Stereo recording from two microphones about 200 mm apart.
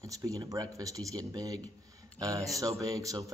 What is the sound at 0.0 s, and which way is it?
A man's voice, 15° right (ahead or behind).